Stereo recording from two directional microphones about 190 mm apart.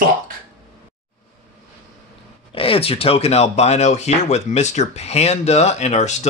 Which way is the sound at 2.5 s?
30° left (ahead or behind).